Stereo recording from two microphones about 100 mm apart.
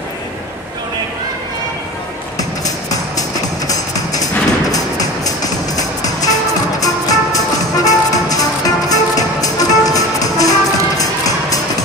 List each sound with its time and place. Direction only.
2.3 s music: 35° left (ahead or behind)